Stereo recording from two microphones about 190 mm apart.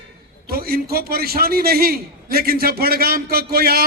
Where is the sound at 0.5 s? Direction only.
50° right (ahead or behind).